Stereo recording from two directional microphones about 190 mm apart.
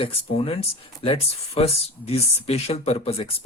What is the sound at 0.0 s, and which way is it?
Speech, 30° left (ahead or behind).